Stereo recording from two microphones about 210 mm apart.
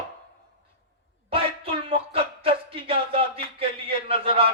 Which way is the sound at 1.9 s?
25° right (ahead or behind).